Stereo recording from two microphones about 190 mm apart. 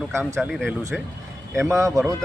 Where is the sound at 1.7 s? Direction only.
15° right (ahead or behind).